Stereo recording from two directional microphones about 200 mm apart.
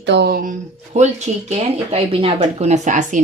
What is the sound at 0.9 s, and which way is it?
Speech, 35° right (ahead or behind).